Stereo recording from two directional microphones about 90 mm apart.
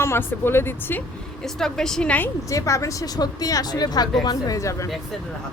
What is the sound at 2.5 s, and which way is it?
Speech, 35° left (ahead or behind).